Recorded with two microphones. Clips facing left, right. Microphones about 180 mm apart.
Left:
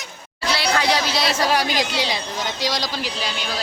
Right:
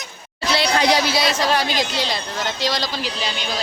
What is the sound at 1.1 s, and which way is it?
Speech, centre (ahead or behind).